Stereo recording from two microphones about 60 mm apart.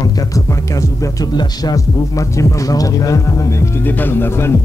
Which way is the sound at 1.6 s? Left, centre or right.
Left.